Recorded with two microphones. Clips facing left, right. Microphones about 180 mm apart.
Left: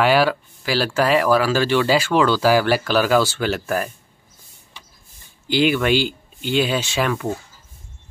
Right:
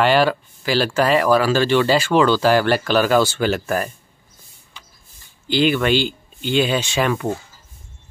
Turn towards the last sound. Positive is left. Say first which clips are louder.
# right 2 dB
turn(degrees=0)  # may be behind; listen again after turning